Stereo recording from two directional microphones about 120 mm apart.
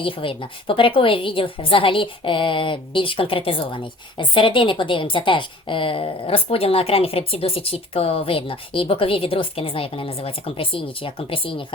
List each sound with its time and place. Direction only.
0.0 s a woman's voice: 50° left (ahead or behind)